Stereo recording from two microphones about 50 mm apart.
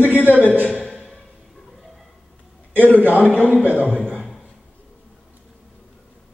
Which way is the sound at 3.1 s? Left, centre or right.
Right.